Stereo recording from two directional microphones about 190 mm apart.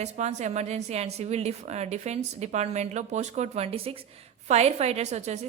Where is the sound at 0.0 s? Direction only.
35° right (ahead or behind).